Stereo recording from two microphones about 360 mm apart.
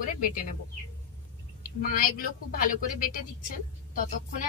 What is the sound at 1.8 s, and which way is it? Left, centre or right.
Speech, left.